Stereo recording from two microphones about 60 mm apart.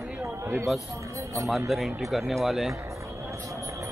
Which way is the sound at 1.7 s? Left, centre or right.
Centre.